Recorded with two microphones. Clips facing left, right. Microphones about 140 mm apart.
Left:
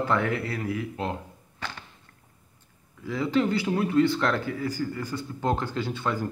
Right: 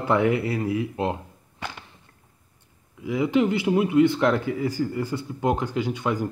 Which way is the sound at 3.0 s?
15° right (ahead or behind).